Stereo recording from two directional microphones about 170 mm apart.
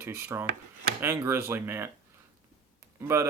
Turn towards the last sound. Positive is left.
turn(degrees=-15)  # may be behind; listen again after turning